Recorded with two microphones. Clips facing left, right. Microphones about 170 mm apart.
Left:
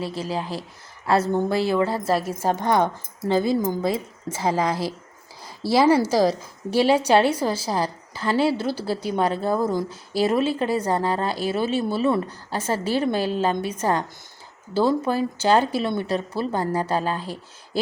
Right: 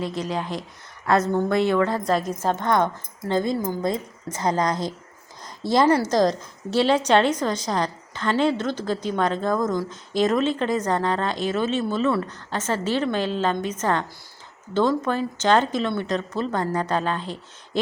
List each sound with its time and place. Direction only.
0.0 s speech: 30° left (ahead or behind)
2.0 s a woman's voice: 5° left (ahead or behind)